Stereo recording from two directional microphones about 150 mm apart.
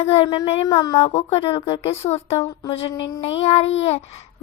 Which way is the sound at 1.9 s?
45° left (ahead or behind).